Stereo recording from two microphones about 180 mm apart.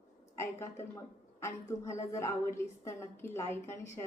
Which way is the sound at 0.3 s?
15° left (ahead or behind).